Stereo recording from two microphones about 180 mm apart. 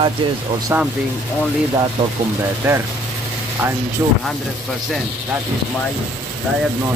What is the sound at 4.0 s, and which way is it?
Speech, 15° right (ahead or behind).